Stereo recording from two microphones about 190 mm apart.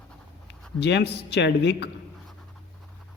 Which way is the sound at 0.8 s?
65° left (ahead or behind).